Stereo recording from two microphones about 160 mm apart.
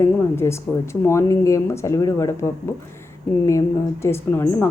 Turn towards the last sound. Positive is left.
turn(degrees=15)  # may be behind; listen again after turning